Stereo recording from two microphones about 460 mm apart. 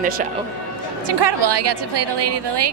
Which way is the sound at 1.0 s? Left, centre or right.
Right.